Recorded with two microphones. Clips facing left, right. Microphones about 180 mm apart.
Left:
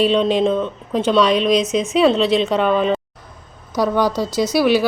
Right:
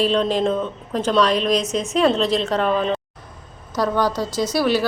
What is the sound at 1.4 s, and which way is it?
Speech, 35° right (ahead or behind).